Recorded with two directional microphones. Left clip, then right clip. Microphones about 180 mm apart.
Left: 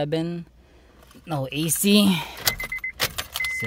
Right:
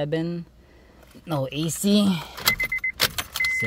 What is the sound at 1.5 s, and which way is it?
Speech, 25° left (ahead or behind).